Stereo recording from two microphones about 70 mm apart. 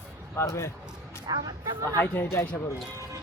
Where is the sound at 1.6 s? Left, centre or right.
Right.